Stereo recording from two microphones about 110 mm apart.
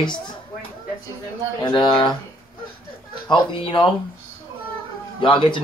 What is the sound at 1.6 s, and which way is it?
Speech, 45° left (ahead or behind).